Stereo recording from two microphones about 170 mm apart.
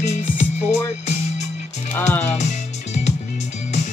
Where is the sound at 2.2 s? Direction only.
45° left (ahead or behind).